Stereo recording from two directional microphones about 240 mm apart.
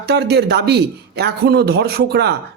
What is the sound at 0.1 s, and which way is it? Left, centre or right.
A man's voice, right.